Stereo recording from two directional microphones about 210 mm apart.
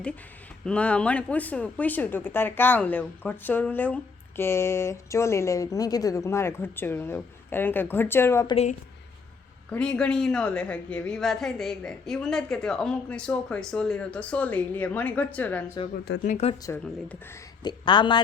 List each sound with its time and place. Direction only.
0.6 s speech: 5° left (ahead or behind)
9.6 s a woman's voice: 5° left (ahead or behind)
16.0 s speech: 55° left (ahead or behind)
16.3 s a woman's voice: 30° left (ahead or behind)
16.6 s speech: 10° left (ahead or behind)
17.6 s a woman's voice: 20° left (ahead or behind)